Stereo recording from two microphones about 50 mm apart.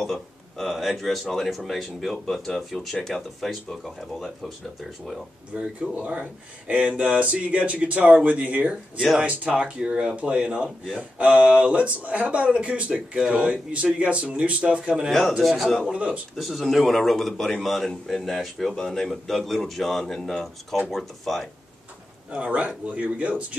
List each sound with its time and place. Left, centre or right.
0.0 s speech: centre
5.5 s speech: right
11.0 s speech: right
15.0 s speech: centre
22.3 s speech: right